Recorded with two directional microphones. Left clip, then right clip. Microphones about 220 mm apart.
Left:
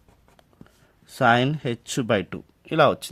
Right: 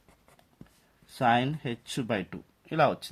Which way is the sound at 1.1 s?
45° left (ahead or behind).